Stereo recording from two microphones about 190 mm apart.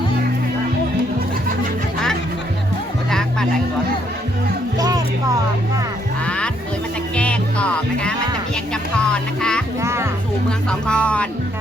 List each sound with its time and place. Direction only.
4.8 s music: 20° right (ahead or behind)
6.2 s music: 5° left (ahead or behind)
9.8 s music: 15° right (ahead or behind)
10.7 s speech: 5° left (ahead or behind)